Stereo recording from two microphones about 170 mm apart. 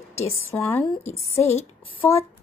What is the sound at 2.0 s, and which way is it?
Speech, 10° left (ahead or behind).